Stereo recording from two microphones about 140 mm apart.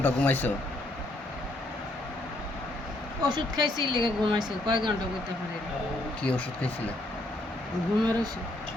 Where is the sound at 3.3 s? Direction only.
30° right (ahead or behind).